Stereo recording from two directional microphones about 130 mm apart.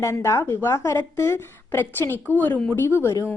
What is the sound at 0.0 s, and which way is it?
A woman's voice, 20° left (ahead or behind).